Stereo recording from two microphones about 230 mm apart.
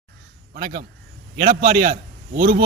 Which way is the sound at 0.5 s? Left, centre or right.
Right.